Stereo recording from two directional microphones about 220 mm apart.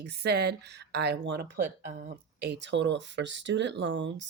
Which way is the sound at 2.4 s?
50° right (ahead or behind).